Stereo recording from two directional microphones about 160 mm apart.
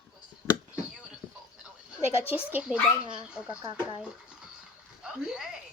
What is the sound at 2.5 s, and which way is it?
A woman's voice, 5° right (ahead or behind).